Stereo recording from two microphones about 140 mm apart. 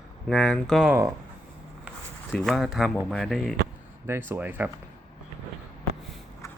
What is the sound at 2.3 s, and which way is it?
Speech, centre (ahead or behind).